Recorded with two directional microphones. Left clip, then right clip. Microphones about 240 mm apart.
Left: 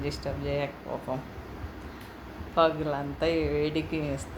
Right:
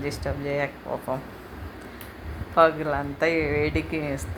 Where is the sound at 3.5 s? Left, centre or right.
Right.